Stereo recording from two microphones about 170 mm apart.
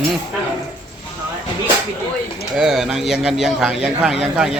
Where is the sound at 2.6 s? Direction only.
5° right (ahead or behind).